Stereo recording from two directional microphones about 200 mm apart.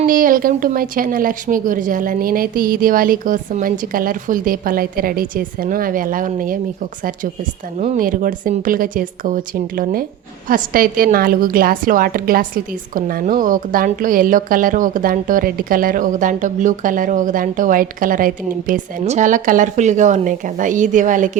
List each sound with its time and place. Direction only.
0.0 s a woman's voice: 45° right (ahead or behind)
7.8 s a woman's voice: 40° right (ahead or behind)